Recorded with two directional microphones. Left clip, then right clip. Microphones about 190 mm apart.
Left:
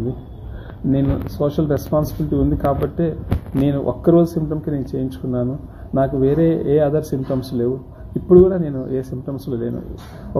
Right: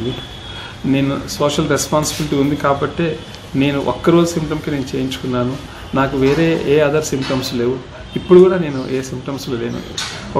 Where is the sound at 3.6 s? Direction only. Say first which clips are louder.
Right 3 dB; 5° right (ahead or behind).